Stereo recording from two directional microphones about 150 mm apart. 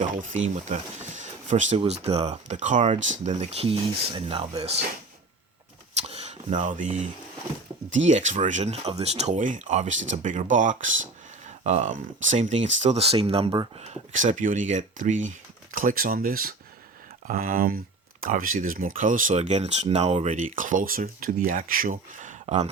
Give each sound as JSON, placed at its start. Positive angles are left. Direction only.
{"t": 0.2, "sound": "speech", "side_deg": -55}
{"t": 6.0, "sound": "a sound", "side_deg": -45}
{"t": 8.0, "sound": "speech", "side_deg": -55}
{"t": 20.6, "sound": "speech", "side_deg": -60}